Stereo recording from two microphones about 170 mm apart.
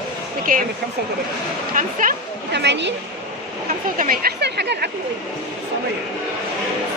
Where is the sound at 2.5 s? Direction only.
90° right.